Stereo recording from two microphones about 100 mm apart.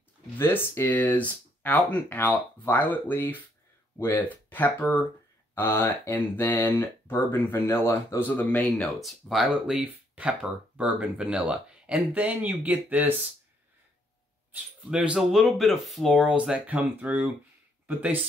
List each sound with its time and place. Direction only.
0.4 s speech: 20° left (ahead or behind); by 13.1 s 15° right (ahead or behind)
14.5 s speech: 10° right (ahead or behind)